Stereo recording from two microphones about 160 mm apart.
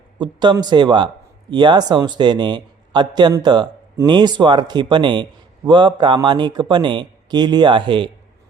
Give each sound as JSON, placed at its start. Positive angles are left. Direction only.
{"t": 0.2, "sound": "speech", "side_deg": -30}